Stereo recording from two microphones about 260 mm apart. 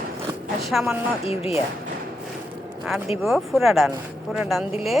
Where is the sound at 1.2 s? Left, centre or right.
Left.